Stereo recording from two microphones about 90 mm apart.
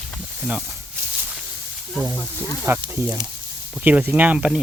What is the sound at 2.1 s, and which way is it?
Speech, 20° left (ahead or behind).